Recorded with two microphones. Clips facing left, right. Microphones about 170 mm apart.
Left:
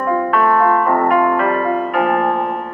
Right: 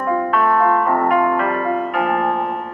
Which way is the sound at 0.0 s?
60° left (ahead or behind).